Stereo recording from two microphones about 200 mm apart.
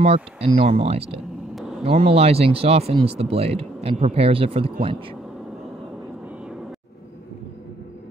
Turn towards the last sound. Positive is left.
turn(degrees=-5)  # may be behind; listen again after turning